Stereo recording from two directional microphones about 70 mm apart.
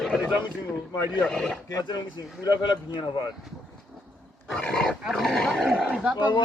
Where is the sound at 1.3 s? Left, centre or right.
Centre.